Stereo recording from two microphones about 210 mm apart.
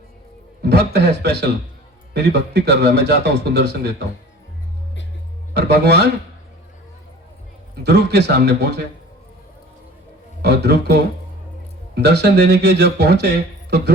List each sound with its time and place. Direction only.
0.6 s speech: 50° right (ahead or behind)
5.5 s speech: 50° right (ahead or behind)
7.9 s speech: 50° right (ahead or behind)
10.4 s speech: 50° right (ahead or behind)